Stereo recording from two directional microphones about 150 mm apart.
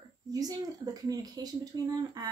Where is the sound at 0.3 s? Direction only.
25° right (ahead or behind).